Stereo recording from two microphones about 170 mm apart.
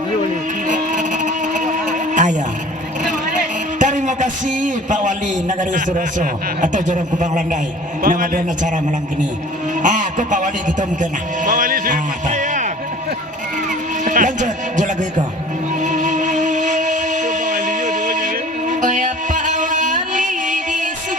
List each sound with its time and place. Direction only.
0.7 s a sound: 45° right (ahead or behind)
3.8 s a man's voice: 45° right (ahead or behind)
9.8 s a man's voice: 45° right (ahead or behind)
10.8 s music: 50° right (ahead or behind)
13.7 s a sound: 50° right (ahead or behind)
15.8 s music: 45° right (ahead or behind)